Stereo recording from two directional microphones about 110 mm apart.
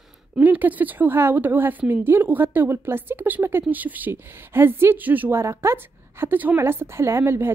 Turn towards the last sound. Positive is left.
turn(degrees=-20)  # may be behind; listen again after turning